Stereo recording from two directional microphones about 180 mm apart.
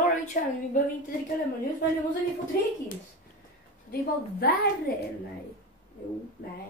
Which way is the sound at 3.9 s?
60° left (ahead or behind).